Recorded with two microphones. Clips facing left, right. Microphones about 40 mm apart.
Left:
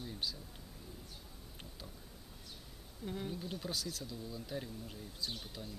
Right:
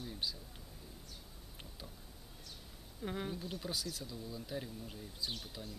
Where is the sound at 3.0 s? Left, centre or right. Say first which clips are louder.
Right 2 dB; right.